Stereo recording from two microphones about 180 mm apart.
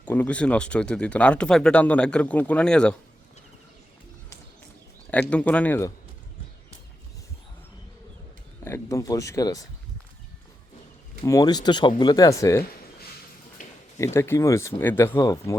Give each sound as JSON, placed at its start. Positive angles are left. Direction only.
{"t": 0.0, "sound": "speech", "side_deg": 10}
{"t": 5.3, "sound": "speech", "side_deg": 5}
{"t": 8.6, "sound": "speech", "side_deg": 15}
{"t": 11.3, "sound": "speech", "side_deg": 20}
{"t": 13.6, "sound": "a sound", "side_deg": 45}
{"t": 14.0, "sound": "speech", "side_deg": 15}